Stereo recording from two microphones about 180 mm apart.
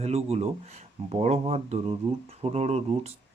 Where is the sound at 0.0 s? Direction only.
35° right (ahead or behind).